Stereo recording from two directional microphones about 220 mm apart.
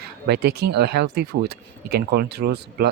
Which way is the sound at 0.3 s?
45° right (ahead or behind).